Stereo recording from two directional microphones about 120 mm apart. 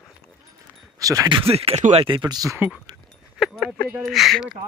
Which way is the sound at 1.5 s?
60° right (ahead or behind).